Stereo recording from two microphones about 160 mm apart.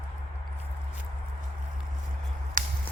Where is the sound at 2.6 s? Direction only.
55° right (ahead or behind).